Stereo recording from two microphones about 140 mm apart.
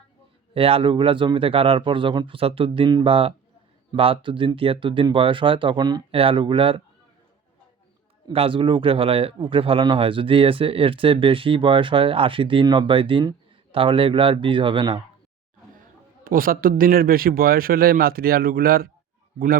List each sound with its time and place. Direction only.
0.5 s speech: 40° right (ahead or behind)
8.3 s speech: 40° right (ahead or behind)
16.2 s a man's voice: 85° right